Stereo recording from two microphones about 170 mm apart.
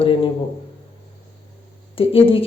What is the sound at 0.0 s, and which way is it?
Speech, 30° left (ahead or behind).